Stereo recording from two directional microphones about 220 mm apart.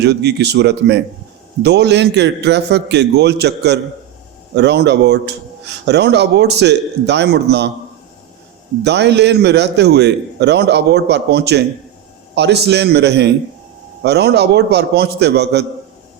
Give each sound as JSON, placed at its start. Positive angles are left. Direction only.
{"t": 0.0, "sound": "a man's voice", "side_deg": -50}
{"t": 8.8, "sound": "a man's voice", "side_deg": -50}